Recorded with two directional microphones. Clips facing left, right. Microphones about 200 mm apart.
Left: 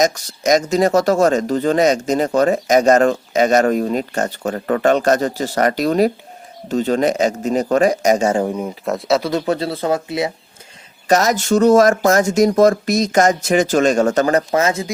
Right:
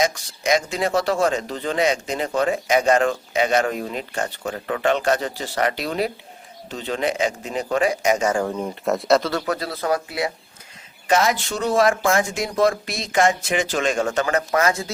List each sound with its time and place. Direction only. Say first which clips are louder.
0.0 s a man's voice: left 5 dB; 40° left (ahead or behind)
8.4 s speech: left 2 dB; 10° left (ahead or behind)
9.3 s speech: left 6 dB; 30° left (ahead or behind)
11.1 s speech: left 5 dB; 40° left (ahead or behind); by 14.8 s 20° left (ahead or behind)